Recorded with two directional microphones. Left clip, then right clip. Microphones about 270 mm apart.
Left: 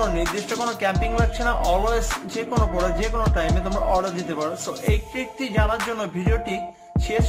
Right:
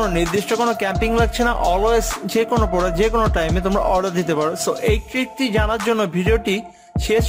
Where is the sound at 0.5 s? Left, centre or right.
Right.